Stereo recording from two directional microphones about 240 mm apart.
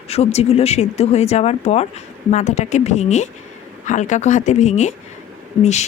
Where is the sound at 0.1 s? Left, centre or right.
Left.